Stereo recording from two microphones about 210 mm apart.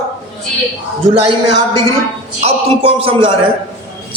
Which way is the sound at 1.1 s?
25° right (ahead or behind).